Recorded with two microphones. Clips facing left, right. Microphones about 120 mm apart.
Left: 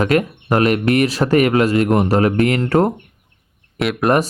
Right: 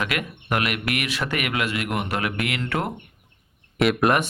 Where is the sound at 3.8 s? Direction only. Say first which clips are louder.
Left 1 dB; centre (ahead or behind).